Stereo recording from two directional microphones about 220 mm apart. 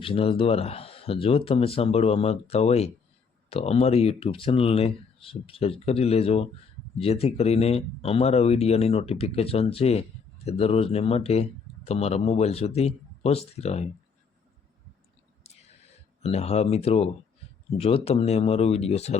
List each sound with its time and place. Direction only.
0.0 s speech: 25° left (ahead or behind)
15.4 s whispering: 30° left (ahead or behind)
16.2 s speech: 30° left (ahead or behind)